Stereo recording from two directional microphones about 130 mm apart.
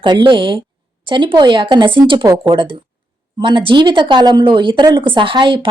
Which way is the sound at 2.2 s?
25° right (ahead or behind).